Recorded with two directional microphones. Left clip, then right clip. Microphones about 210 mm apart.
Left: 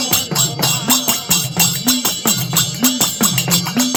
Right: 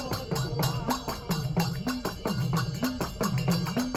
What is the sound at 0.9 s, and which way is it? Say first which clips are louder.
Music: left 14 dB; 25° left (ahead or behind).